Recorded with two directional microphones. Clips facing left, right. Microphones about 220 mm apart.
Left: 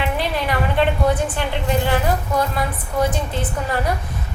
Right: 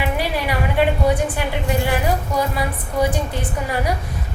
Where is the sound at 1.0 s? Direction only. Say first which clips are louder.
Right 1 dB; 10° right (ahead or behind).